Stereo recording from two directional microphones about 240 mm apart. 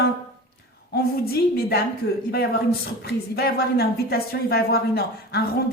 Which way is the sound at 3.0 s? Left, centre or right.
Left.